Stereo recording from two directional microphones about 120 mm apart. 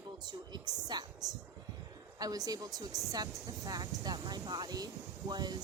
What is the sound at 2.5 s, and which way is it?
Speech, 35° right (ahead or behind).